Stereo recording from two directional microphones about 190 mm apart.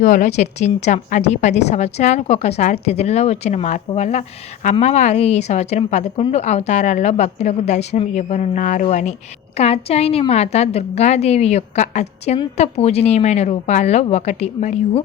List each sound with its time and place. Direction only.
0.0 s a woman's voice: 40° left (ahead or behind)